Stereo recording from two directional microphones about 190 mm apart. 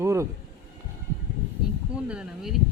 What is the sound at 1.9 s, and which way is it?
Speech, 5° right (ahead or behind).